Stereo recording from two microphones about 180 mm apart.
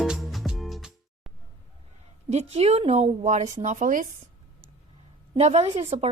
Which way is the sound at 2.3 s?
35° right (ahead or behind).